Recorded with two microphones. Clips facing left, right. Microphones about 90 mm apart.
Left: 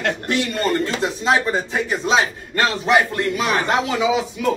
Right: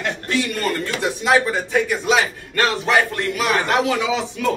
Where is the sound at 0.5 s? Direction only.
25° left (ahead or behind).